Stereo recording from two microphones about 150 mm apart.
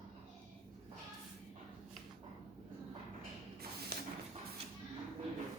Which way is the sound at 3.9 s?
90° right.